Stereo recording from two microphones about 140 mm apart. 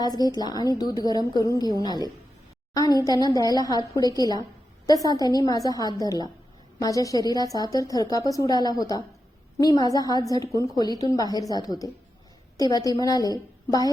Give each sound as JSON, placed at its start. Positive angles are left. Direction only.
{"t": 0.0, "sound": "a woman's voice", "side_deg": 30}